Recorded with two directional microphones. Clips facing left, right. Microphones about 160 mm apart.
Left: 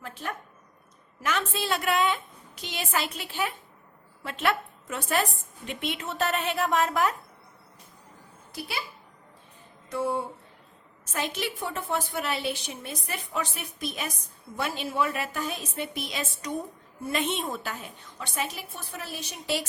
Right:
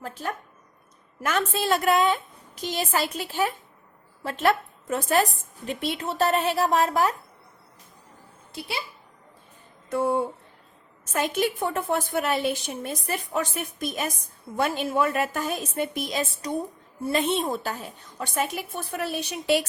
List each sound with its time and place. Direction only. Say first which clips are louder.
0.0 s a woman's voice: right 4 dB; 40° right (ahead or behind)
8.5 s a child's voice: right 2 dB; 25° right (ahead or behind)
11.1 s a woman's voice: right 6 dB; 50° right (ahead or behind)
18.3 s a woman's voice: right 5 dB; 55° right (ahead or behind)